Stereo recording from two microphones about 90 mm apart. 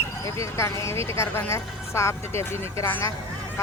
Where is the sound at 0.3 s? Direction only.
35° left (ahead or behind).